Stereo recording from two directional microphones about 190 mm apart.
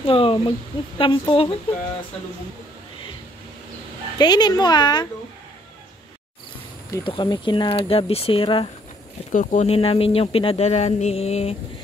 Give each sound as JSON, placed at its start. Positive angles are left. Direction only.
{"t": 0.0, "sound": "speech", "side_deg": 30}
{"t": 4.2, "sound": "speech", "side_deg": 20}
{"t": 6.9, "sound": "speech", "side_deg": 25}
{"t": 9.3, "sound": "speech", "side_deg": 45}